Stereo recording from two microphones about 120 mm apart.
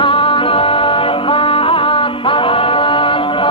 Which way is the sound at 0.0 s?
45° left (ahead or behind).